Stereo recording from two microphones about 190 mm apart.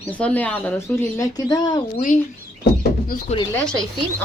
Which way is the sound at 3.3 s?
40° left (ahead or behind).